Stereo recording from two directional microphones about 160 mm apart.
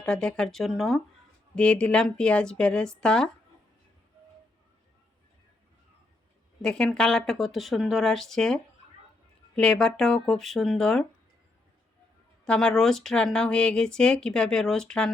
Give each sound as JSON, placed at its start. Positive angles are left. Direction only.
{"t": 0.0, "sound": "speech", "side_deg": 5}
{"t": 6.6, "sound": "speech", "side_deg": 5}
{"t": 12.5, "sound": "speech", "side_deg": 5}